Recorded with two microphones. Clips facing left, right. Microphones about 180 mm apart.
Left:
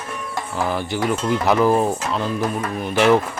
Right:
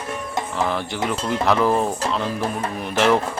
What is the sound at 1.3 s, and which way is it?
Speech, 5° left (ahead or behind).